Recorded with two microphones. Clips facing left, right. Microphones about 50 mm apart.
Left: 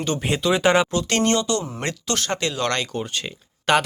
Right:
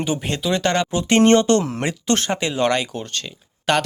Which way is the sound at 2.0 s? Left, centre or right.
Right.